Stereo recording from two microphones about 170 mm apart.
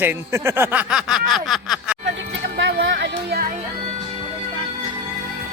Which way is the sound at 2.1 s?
85° right.